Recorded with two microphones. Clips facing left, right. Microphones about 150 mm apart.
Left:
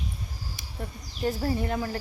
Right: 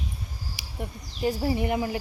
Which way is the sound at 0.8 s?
10° right (ahead or behind).